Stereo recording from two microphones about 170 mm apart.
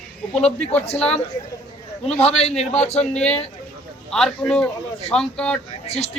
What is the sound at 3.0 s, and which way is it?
Speech, 5° left (ahead or behind).